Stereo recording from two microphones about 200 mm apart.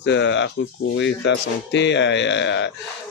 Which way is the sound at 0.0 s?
65° left (ahead or behind).